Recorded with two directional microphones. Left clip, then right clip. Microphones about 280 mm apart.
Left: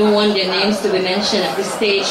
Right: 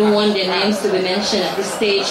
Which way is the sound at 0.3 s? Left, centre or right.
Centre.